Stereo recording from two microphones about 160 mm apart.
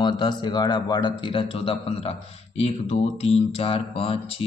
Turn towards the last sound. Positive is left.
turn(degrees=35)  # may be behind; listen again after turning